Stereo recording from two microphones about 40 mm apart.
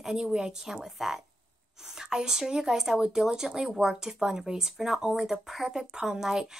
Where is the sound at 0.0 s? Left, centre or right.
Centre.